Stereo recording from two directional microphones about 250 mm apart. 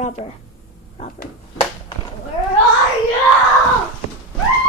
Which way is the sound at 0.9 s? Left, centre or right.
Left.